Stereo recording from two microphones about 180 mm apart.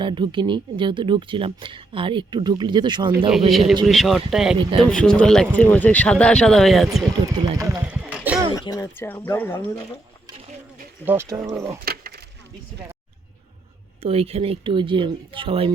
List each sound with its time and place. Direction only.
0.0 s speech: 25° right (ahead or behind)
3.5 s speech: centre (ahead or behind)
7.3 s speech: 20° right (ahead or behind)
7.9 s a sound: 10° right (ahead or behind)
8.5 s speech: 20° left (ahead or behind)
11.0 s speech: 10° right (ahead or behind)
11.9 s keys jangling: 55° right (ahead or behind)
14.0 s speech: 30° right (ahead or behind)